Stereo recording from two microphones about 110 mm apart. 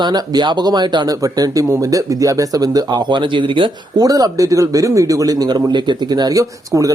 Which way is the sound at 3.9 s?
35° right (ahead or behind).